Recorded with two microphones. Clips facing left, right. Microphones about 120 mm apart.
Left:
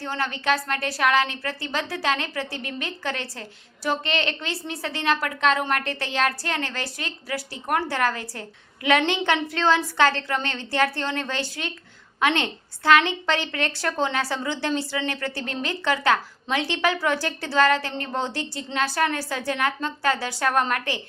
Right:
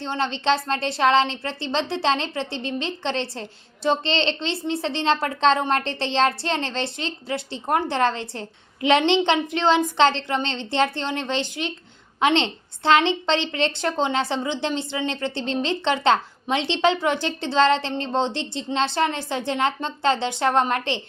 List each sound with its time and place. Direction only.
0.0 s a woman's voice: 25° right (ahead or behind)